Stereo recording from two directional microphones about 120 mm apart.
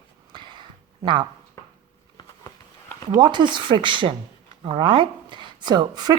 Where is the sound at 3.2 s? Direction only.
40° right (ahead or behind).